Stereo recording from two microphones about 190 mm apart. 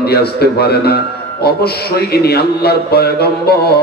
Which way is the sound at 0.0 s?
55° left (ahead or behind).